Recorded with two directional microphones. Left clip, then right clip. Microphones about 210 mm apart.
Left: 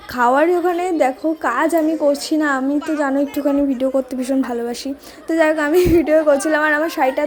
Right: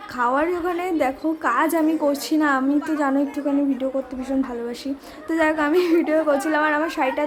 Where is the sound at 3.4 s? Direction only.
25° left (ahead or behind).